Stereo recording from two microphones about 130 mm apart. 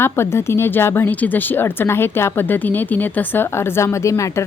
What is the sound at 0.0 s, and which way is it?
A woman's voice, 20° left (ahead or behind).